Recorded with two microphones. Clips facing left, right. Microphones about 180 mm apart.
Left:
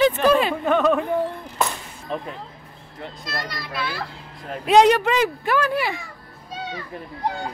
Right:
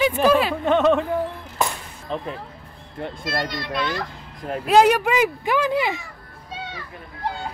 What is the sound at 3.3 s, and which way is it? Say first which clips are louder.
Speech: right 5 dB; centre (ahead or behind).